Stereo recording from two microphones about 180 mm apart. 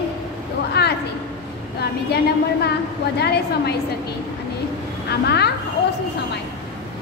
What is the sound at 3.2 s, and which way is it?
Speech, 65° left (ahead or behind).